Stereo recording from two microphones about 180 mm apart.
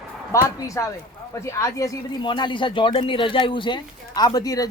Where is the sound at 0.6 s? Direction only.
20° left (ahead or behind).